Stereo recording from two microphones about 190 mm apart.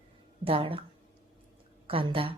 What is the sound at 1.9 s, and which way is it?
Speech, 30° right (ahead or behind).